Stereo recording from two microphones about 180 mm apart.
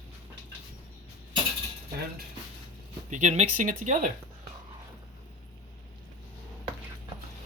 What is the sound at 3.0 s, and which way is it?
Speech, 40° right (ahead or behind).